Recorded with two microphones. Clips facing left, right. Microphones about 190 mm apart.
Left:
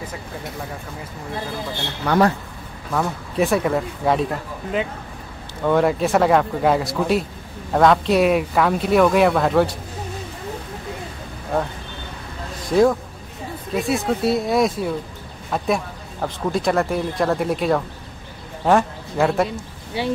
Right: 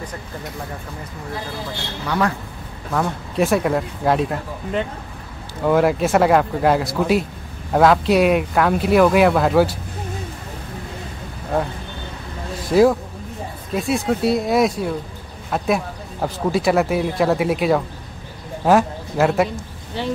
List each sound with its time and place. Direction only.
2.0 s a man's voice: 40° left (ahead or behind)
2.9 s speech: centre (ahead or behind)
12.6 s speech: 5° right (ahead or behind)
19.9 s speech: 10° left (ahead or behind)